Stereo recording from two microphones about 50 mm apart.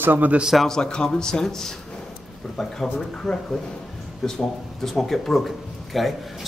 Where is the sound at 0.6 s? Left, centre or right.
Centre.